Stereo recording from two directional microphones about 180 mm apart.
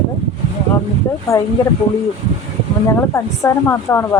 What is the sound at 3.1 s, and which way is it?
Speech, 15° left (ahead or behind).